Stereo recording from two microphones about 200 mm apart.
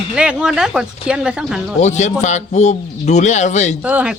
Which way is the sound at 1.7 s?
35° left (ahead or behind).